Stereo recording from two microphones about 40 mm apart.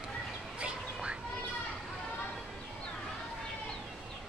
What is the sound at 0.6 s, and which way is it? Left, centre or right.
Duck, right.